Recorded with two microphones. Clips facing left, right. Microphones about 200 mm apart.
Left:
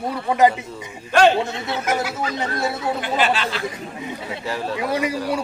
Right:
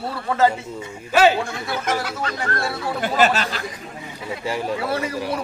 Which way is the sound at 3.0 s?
45° right (ahead or behind).